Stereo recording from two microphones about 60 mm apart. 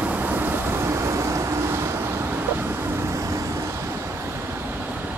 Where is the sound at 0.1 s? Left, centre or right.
Right.